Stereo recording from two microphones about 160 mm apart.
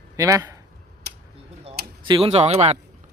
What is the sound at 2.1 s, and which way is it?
Speech, 40° right (ahead or behind).